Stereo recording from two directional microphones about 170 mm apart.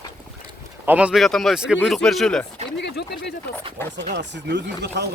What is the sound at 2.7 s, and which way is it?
Speech, 90° left.